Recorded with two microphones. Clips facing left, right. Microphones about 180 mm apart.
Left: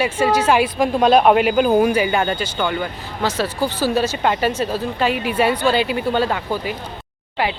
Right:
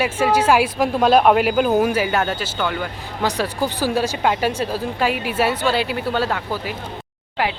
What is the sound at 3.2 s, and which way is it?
A woman's voice, 15° right (ahead or behind).